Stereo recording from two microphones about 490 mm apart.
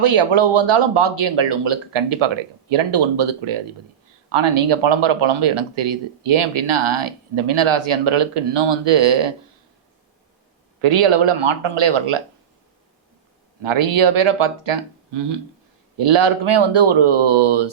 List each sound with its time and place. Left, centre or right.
0.0 s speech: right
10.8 s speech: right
13.6 s speech: right